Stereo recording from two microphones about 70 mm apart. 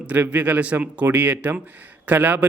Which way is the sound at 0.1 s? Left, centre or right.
Right.